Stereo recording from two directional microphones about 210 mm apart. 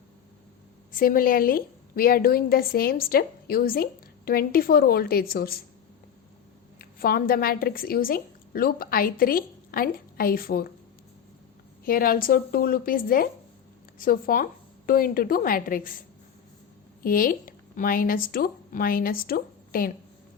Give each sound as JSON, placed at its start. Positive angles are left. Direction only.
{"t": 0.9, "sound": "a woman's voice", "side_deg": 40}
{"t": 6.7, "sound": "a woman's voice", "side_deg": 45}
{"t": 11.9, "sound": "a woman's voice", "side_deg": 45}
{"t": 17.0, "sound": "speech", "side_deg": 45}